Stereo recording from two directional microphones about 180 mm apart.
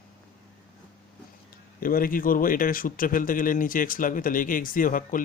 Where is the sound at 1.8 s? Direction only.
50° left (ahead or behind).